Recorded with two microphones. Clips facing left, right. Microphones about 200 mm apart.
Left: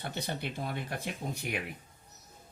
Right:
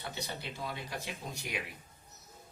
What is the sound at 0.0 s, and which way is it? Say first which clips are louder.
Speech: left 5 dB; 55° left (ahead or behind).